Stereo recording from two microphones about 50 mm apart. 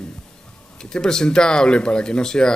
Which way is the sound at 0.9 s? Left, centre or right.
Centre.